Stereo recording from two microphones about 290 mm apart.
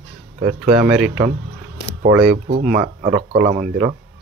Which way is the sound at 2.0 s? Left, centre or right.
Right.